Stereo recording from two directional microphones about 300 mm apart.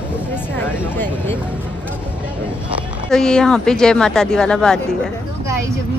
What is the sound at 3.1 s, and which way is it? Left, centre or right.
Speech, centre.